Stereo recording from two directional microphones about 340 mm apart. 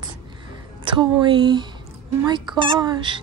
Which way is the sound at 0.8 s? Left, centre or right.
Centre.